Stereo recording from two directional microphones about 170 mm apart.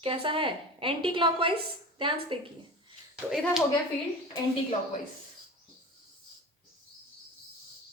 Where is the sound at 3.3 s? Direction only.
Centre (ahead or behind).